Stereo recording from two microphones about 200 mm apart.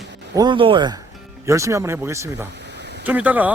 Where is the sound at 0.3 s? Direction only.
25° right (ahead or behind).